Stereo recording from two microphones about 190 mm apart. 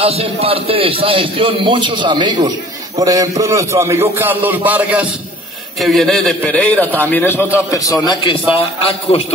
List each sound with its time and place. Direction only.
0.0 s a man's voice: 30° right (ahead or behind); by 9.2 s 30° left (ahead or behind)